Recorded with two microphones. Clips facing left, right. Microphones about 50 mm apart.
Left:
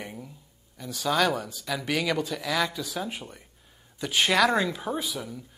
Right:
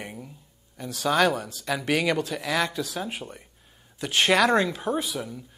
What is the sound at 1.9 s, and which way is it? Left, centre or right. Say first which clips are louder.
Speech: right 3 dB; centre.